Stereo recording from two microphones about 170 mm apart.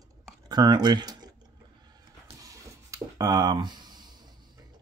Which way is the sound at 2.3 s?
20° right (ahead or behind).